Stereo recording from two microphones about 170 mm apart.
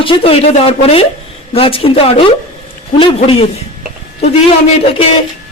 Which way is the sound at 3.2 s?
35° left (ahead or behind).